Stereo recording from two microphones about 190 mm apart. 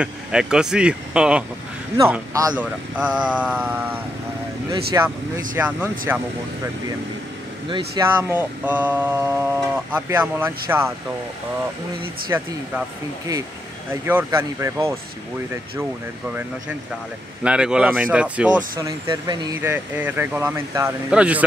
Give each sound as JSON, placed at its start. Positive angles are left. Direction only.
{"t": 0.0, "sound": "speech", "side_deg": -5}
{"t": 2.0, "sound": "mantra", "side_deg": -15}
{"t": 8.0, "sound": "mantra", "side_deg": -10}
{"t": 12.3, "sound": "mantra", "side_deg": -15}
{"t": 14.0, "sound": "mantra", "side_deg": -15}
{"t": 17.4, "sound": "speech", "side_deg": -5}
{"t": 18.8, "sound": "speech", "side_deg": -20}
{"t": 19.7, "sound": "mantra", "side_deg": -10}